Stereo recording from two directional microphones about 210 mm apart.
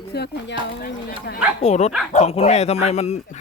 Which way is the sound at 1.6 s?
30° left (ahead or behind).